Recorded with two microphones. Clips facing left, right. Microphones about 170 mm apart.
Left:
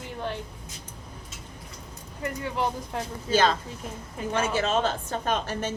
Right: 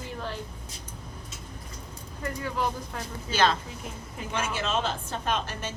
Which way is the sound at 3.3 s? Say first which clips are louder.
Left 2 dB; 45° left (ahead or behind).